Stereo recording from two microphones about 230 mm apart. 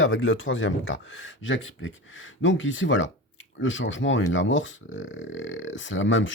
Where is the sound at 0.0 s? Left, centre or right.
Left.